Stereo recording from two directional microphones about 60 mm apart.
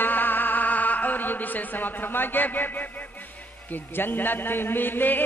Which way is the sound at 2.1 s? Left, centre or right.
Left.